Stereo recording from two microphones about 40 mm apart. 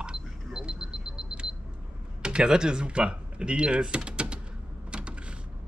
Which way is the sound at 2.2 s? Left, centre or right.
Right.